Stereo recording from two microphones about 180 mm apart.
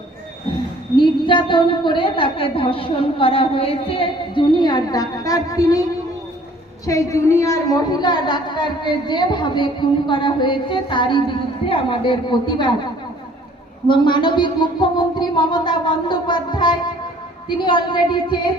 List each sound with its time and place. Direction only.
0.9 s a woman's voice: 25° left (ahead or behind)
6.8 s a woman's voice: 15° left (ahead or behind)
13.8 s music: 25° left (ahead or behind)
17.5 s a woman's voice: 25° left (ahead or behind)